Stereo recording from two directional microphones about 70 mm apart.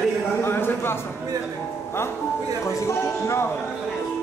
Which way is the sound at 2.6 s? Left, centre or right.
Left.